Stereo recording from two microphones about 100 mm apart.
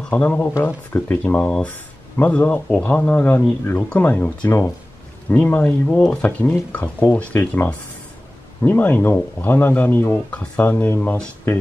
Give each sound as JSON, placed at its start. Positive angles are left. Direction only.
{"t": 0.0, "sound": "speech", "side_deg": 15}